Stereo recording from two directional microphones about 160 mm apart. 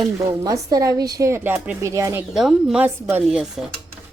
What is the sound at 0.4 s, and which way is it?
Speech, 20° right (ahead or behind).